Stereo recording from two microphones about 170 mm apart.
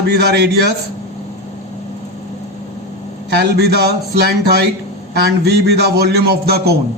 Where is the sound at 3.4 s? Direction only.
70° right (ahead or behind).